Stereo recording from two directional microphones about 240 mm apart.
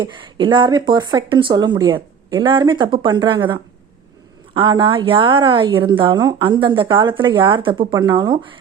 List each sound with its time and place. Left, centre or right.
0.0 s speech: right